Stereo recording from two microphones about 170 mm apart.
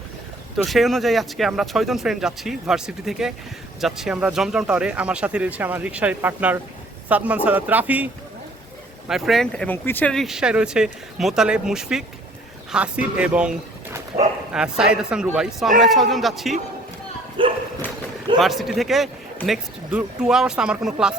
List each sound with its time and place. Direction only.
0.5 s speech: centre (ahead or behind)
17.4 s speech: 30° right (ahead or behind)
18.3 s speech: centre (ahead or behind)